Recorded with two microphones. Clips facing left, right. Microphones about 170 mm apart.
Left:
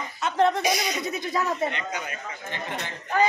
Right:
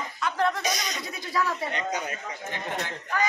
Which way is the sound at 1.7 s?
40° right (ahead or behind).